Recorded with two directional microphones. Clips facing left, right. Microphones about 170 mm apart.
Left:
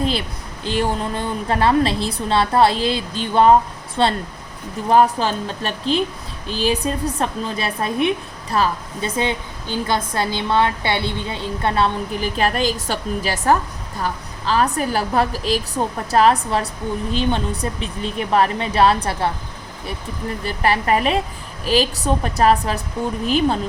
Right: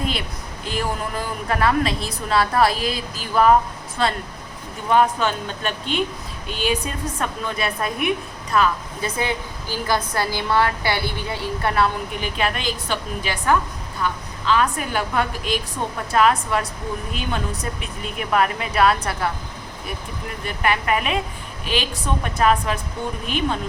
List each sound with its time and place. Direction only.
0.6 s a woman's voice: 30° left (ahead or behind)
20.4 s a woman's voice: 35° left (ahead or behind)